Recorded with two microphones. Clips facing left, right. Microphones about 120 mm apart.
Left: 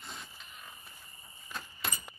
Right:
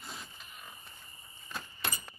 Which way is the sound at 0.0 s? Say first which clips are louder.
Right 1 dB; centre (ahead or behind).